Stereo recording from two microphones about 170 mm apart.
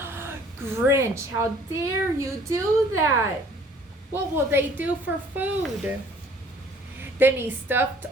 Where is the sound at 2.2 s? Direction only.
15° right (ahead or behind).